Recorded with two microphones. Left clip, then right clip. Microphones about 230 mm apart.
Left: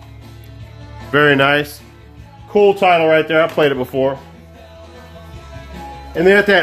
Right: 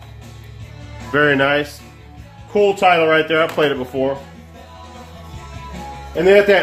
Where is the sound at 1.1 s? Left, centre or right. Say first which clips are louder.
Left 3 dB; left.